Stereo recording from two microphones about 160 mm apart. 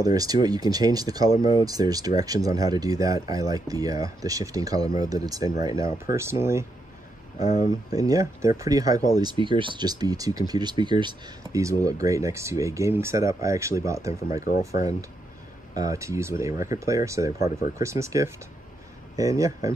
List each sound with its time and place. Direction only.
0.0 s speech: 20° right (ahead or behind)
7.3 s speech: 20° right (ahead or behind)